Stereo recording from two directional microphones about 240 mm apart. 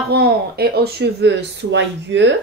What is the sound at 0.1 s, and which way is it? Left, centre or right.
Speech, right.